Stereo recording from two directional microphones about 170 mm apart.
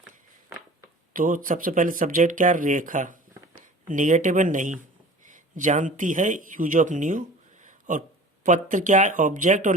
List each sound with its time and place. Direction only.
1.1 s speech: 55° right (ahead or behind)